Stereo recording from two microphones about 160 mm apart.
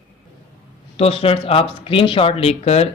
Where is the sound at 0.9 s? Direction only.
40° left (ahead or behind).